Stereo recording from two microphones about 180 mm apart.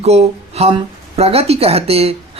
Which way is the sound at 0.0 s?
35° right (ahead or behind).